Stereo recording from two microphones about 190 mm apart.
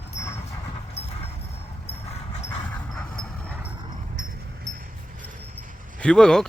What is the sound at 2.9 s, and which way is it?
Vehicle, 5° left (ahead or behind).